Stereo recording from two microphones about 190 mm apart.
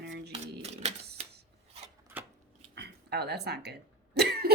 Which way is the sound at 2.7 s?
60° right (ahead or behind).